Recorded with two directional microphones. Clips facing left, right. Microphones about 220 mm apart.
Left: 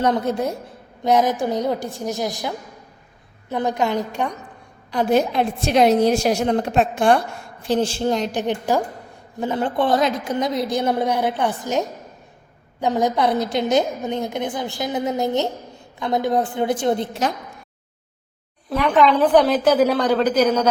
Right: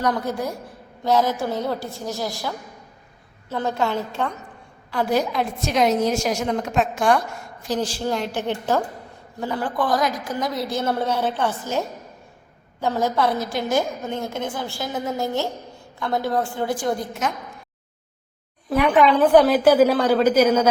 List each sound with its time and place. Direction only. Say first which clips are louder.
0.0 s a woman's voice: left 4 dB; 25° left (ahead or behind)
18.7 s a woman's voice: even; 10° right (ahead or behind)